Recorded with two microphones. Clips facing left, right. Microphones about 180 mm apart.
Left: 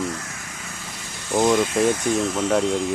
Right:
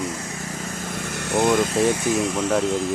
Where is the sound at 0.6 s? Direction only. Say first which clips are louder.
Right 8 dB; 50° right (ahead or behind).